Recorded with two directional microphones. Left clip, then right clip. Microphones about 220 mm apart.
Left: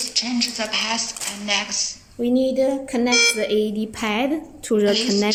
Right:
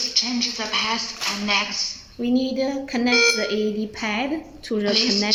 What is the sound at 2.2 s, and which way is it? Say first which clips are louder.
Speech: left 4 dB; 45° left (ahead or behind).